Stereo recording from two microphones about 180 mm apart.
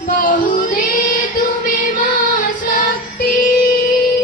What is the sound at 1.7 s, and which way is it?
Music, 45° left (ahead or behind).